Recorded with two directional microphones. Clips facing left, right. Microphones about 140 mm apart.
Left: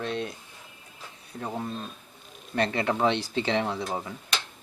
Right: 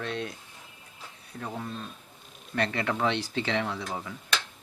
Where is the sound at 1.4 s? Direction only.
25° left (ahead or behind).